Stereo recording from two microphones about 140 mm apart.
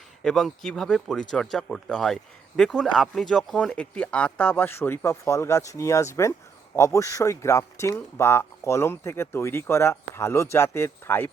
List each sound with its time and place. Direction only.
0.2 s speech: 5° left (ahead or behind)